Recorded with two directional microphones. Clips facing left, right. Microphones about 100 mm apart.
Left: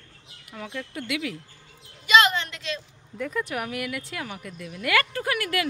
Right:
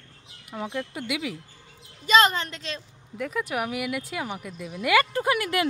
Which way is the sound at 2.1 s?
40° right (ahead or behind).